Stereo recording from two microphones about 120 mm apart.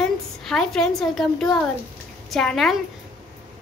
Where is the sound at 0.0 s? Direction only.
5° left (ahead or behind).